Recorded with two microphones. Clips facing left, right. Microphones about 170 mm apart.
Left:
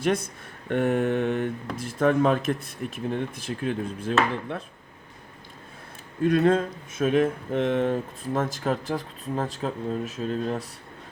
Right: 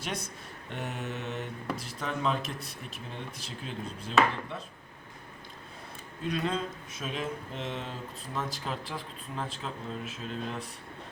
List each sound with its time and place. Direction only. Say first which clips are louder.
0.0 s speech: left 12 dB; 50° left (ahead or behind)
0.7 s mantra: left 14 dB; 55° left (ahead or behind)
1.7 s speech: left 13 dB; 50° left (ahead or behind)
6.2 s speech: left 11 dB; 55° left (ahead or behind)